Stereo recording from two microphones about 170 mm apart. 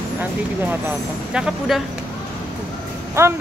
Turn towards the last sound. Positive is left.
turn(degrees=-15)  # may be behind; listen again after turning